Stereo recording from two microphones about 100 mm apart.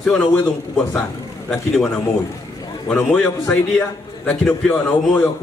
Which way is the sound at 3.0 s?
5° left (ahead or behind).